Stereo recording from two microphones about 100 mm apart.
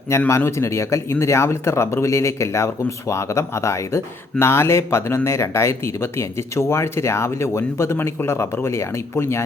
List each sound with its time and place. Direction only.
0.3 s speech: 25° left (ahead or behind)